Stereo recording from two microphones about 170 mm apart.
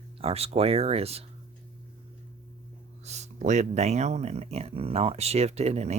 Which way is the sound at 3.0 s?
40° right (ahead or behind).